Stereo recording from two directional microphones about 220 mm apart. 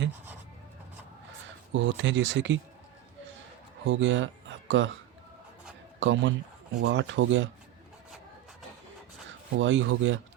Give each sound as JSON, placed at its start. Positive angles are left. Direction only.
{"t": 1.7, "sound": "speech", "side_deg": -55}
{"t": 3.8, "sound": "speech", "side_deg": -60}
{"t": 6.0, "sound": "speech", "side_deg": -55}
{"t": 9.6, "sound": "speech", "side_deg": -60}